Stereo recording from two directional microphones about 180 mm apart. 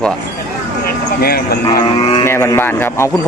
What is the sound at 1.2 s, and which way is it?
Speech, 60° left (ahead or behind).